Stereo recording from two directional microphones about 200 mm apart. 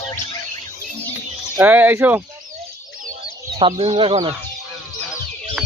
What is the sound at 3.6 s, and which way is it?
Speech, 30° right (ahead or behind).